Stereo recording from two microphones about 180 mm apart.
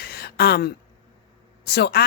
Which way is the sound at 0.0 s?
60° left (ahead or behind).